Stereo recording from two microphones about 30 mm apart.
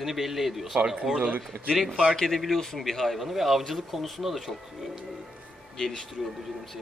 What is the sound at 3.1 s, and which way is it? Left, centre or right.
A man's voice, centre.